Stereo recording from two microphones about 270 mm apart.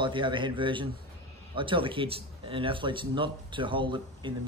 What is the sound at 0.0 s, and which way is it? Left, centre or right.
Speech, centre.